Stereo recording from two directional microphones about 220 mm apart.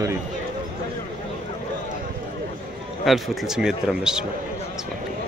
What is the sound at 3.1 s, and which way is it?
Speech, centre (ahead or behind).